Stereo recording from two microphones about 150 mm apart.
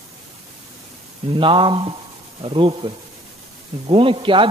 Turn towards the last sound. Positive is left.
turn(degrees=-35)  # may be behind; listen again after turning